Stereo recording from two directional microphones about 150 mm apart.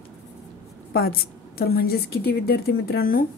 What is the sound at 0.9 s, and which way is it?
A woman's voice, 90° left.